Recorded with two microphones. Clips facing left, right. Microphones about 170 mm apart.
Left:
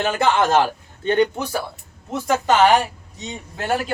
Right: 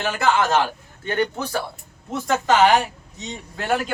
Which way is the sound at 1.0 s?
20° left (ahead or behind).